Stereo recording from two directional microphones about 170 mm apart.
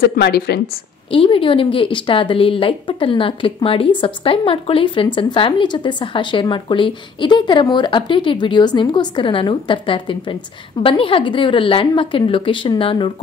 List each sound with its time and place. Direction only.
0.0 s a woman's voice: 65° left (ahead or behind)
1.1 s a woman's voice: 30° left (ahead or behind)